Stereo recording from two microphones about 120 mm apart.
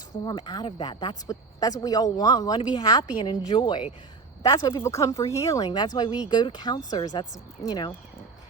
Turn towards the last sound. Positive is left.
turn(degrees=35)  # may be behind; listen again after turning